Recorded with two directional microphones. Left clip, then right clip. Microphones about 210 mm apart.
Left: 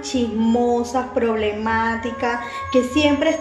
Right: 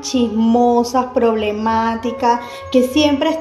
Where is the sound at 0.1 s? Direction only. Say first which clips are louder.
Right 4 dB; 30° right (ahead or behind).